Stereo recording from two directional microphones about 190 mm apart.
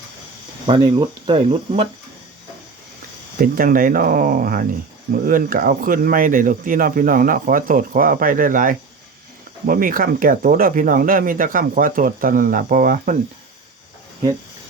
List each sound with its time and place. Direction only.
0.7 s speech: 25° right (ahead or behind)
3.4 s speech: 50° right (ahead or behind)